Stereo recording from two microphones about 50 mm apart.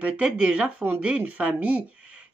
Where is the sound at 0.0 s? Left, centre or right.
Right.